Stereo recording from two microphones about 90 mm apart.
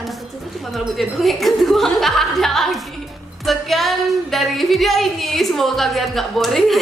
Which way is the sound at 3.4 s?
Centre (ahead or behind).